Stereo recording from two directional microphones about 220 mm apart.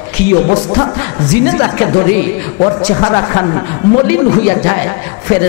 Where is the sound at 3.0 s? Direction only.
20° left (ahead or behind).